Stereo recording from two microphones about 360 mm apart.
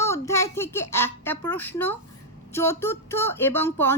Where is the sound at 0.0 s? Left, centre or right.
Centre.